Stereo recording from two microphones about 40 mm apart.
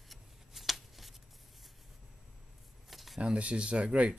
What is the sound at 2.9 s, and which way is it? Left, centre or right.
Shuffling cards, centre.